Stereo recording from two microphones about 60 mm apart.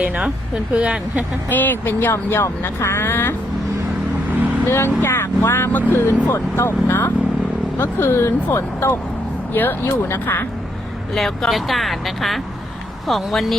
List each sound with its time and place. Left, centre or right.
0.0 s speech: centre
1.5 s speech: left
2.1 s speech: left
4.6 s speech: left
5.5 s speech: left
6.2 s speech: left
9.5 s speech: left
11.1 s speech: centre